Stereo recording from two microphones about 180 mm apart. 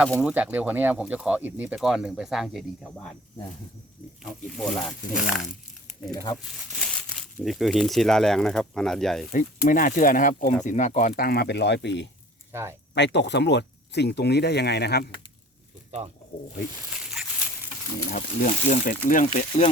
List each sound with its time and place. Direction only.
0.2 s speech: 5° right (ahead or behind)
4.2 s speech: centre (ahead or behind)
9.3 s speech: 45° left (ahead or behind)
11.2 s speech: 60° left (ahead or behind)
12.5 s speech: 15° right (ahead or behind)
12.9 s speech: 75° left (ahead or behind)
18.1 s speech: 50° left (ahead or behind)